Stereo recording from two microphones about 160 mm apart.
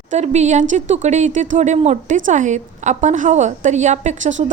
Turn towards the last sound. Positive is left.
turn(degrees=-50)  # may be behind; listen again after turning